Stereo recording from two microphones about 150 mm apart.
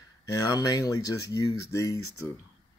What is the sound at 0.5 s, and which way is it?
Speech, 25° left (ahead or behind).